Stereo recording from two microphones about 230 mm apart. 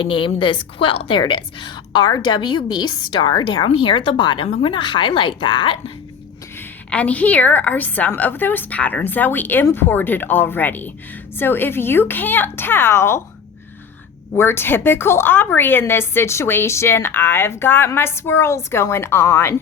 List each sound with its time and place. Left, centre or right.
0.0 s a woman's voice: left
6.9 s a woman's voice: centre
14.3 s a woman's voice: centre